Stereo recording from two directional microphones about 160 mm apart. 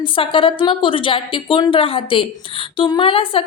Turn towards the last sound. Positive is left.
turn(degrees=35)  # may be behind; listen again after turning